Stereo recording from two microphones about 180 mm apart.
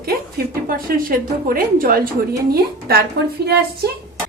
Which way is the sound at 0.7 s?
55° right (ahead or behind).